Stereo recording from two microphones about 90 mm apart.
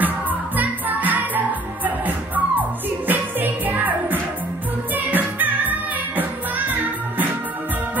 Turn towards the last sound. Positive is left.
turn(degrees=-20)  # may be behind; listen again after turning